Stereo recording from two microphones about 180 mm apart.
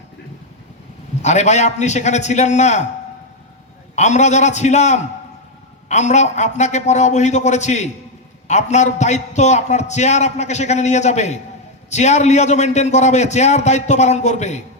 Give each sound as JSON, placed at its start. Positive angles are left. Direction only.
{"t": 1.2, "sound": "a man's voice", "side_deg": 40}
{"t": 3.9, "sound": "a man's voice", "side_deg": 40}